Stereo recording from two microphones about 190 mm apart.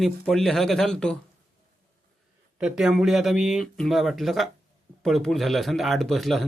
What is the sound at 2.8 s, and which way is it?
Speech, centre (ahead or behind).